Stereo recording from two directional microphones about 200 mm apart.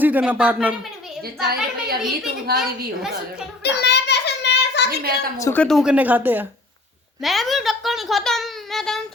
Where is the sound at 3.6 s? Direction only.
55° left (ahead or behind).